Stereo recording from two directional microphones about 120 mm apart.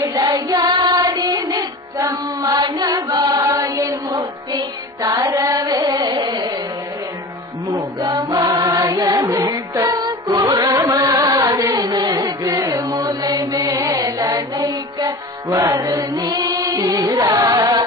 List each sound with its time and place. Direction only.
0.0 s music: 30° right (ahead or behind)
5.1 s carnatic music: 30° right (ahead or behind)
7.7 s music: 30° right (ahead or behind)